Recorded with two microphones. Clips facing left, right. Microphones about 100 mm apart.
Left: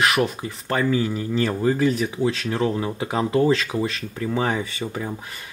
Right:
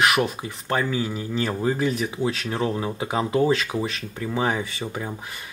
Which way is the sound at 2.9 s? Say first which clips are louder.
Left 1 dB; 15° right (ahead or behind).